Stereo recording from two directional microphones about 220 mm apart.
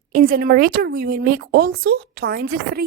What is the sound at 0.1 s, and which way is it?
Speech, 40° right (ahead or behind).